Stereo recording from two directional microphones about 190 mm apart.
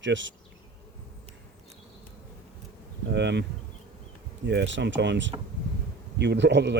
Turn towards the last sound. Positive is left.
turn(degrees=-65)  # may be behind; listen again after turning